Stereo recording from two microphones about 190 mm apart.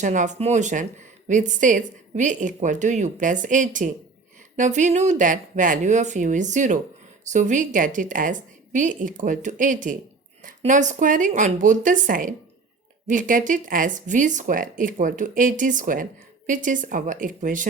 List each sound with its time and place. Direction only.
0.0 s a woman's voice: 40° right (ahead or behind)